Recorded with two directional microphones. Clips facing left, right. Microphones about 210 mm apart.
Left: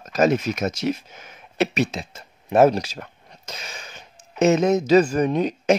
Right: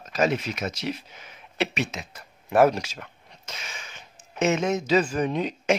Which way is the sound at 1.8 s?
30° left (ahead or behind).